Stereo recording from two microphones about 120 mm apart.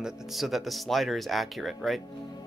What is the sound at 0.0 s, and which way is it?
Speech, centre (ahead or behind).